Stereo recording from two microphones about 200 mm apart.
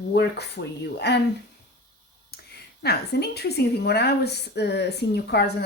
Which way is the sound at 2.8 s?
55° left (ahead or behind).